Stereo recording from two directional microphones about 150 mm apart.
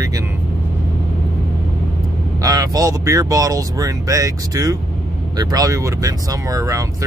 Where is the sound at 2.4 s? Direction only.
25° right (ahead or behind).